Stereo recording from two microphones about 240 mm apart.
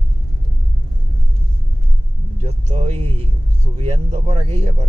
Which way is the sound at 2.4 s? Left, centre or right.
Right.